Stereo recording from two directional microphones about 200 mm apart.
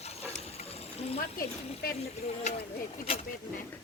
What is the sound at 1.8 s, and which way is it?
Speech, 50° left (ahead or behind).